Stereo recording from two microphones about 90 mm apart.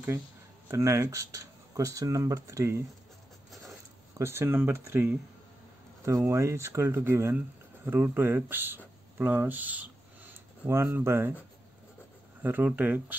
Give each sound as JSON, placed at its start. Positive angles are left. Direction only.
{"t": 0.7, "sound": "speech", "side_deg": -30}
{"t": 4.2, "sound": "speech", "side_deg": -30}
{"t": 12.4, "sound": "speech", "side_deg": -20}